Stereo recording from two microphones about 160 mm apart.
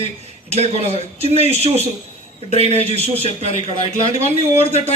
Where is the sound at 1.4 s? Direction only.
40° right (ahead or behind).